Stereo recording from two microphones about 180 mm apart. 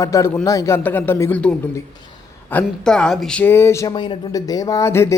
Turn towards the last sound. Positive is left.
turn(degrees=15)  # may be behind; listen again after turning